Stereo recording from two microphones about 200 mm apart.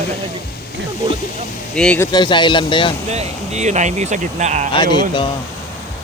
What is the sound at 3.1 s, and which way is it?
Speech, 35° right (ahead or behind).